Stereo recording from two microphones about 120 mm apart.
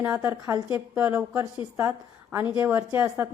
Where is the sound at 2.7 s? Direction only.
15° right (ahead or behind).